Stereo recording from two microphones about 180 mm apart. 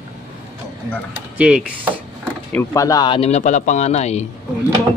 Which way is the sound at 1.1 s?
5° right (ahead or behind).